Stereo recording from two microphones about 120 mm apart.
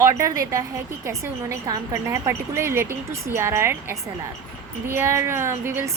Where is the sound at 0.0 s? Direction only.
25° right (ahead or behind).